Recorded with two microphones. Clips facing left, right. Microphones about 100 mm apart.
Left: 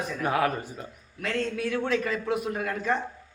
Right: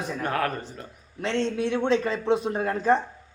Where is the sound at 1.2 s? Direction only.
25° right (ahead or behind).